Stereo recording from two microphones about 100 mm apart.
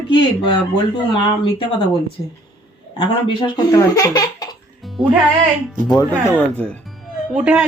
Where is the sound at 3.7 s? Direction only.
35° left (ahead or behind).